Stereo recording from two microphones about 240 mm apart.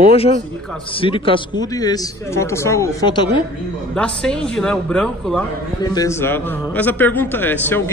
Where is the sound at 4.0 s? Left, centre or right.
Centre.